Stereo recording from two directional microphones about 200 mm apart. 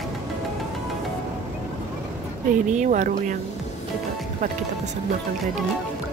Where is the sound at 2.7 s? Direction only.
35° right (ahead or behind).